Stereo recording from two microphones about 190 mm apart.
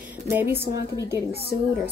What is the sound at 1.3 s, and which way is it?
Speech, 55° left (ahead or behind).